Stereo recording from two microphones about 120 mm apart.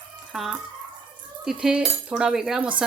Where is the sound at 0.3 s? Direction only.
Centre (ahead or behind).